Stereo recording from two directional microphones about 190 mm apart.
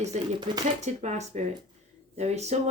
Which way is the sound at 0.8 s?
35° right (ahead or behind).